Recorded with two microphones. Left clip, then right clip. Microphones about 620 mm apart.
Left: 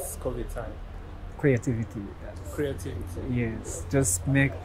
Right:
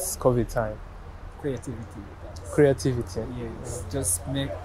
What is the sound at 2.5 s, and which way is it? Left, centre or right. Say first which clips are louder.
Speech: right 11 dB; right.